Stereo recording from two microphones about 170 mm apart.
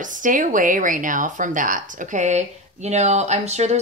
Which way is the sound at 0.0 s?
50° right (ahead or behind).